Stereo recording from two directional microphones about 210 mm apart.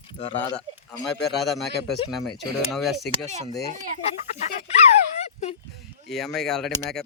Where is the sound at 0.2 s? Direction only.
20° left (ahead or behind).